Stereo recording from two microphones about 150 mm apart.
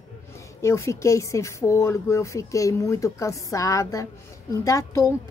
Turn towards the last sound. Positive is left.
turn(degrees=20)  # may be behind; listen again after turning